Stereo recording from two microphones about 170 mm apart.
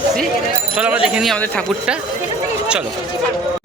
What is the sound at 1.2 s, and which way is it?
Speech, 5° left (ahead or behind).